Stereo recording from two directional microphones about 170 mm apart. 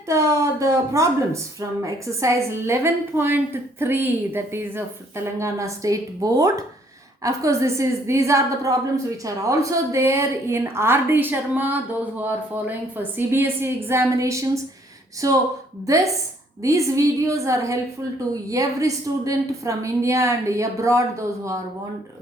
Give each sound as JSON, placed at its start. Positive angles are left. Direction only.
{"t": 0.1, "sound": "a woman's voice", "side_deg": -15}
{"t": 16.6, "sound": "a woman's voice", "side_deg": -20}